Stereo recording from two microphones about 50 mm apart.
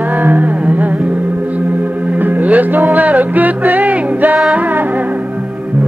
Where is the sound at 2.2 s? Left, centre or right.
Right.